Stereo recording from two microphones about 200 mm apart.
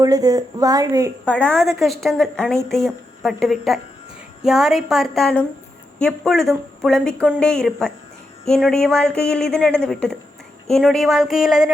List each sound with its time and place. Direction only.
0.0 s a woman's voice: 20° right (ahead or behind)
1.2 s speech: 5° left (ahead or behind)